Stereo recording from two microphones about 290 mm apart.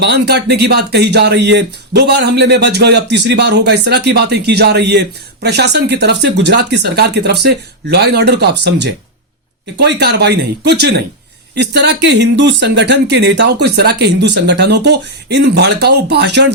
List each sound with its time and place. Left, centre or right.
0.0 s speech: right